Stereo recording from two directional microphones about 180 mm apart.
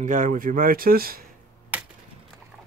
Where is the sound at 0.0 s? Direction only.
45° right (ahead or behind).